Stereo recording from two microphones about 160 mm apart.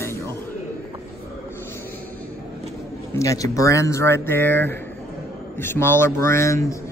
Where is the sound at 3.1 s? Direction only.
20° left (ahead or behind).